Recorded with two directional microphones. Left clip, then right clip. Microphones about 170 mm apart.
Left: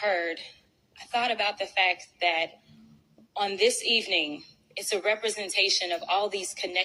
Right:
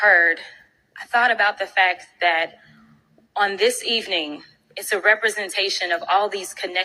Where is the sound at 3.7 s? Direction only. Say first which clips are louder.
Right 3 dB; 10° left (ahead or behind).